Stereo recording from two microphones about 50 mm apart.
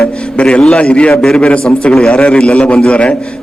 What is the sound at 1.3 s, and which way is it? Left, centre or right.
A man's voice, left.